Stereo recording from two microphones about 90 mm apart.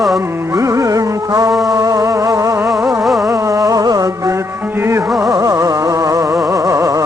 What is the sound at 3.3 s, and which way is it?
Music, 35° right (ahead or behind).